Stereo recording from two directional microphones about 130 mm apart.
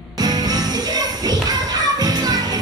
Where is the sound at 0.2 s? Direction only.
30° right (ahead or behind).